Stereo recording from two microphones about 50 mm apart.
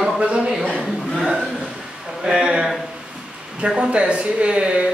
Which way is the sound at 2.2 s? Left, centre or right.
Centre.